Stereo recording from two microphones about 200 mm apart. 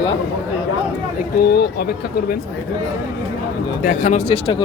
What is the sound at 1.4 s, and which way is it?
Speech, 55° left (ahead or behind).